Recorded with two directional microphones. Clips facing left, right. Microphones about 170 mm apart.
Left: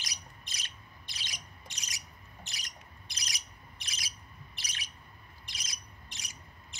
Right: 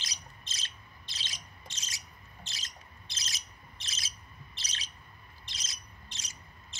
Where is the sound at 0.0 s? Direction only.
15° left (ahead or behind).